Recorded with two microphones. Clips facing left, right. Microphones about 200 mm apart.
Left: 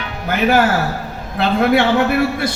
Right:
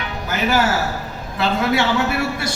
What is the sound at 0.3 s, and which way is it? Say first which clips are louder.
A man's voice: left 4 dB; 55° left (ahead or behind).